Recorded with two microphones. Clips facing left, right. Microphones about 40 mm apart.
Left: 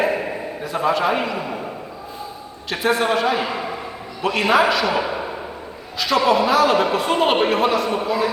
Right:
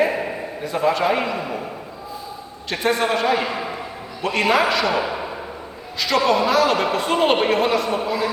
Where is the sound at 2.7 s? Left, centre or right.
Centre.